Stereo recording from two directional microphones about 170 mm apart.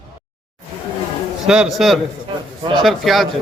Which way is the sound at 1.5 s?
5° right (ahead or behind).